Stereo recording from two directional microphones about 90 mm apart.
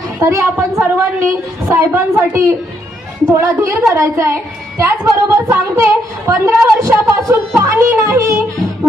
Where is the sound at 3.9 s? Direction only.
30° right (ahead or behind).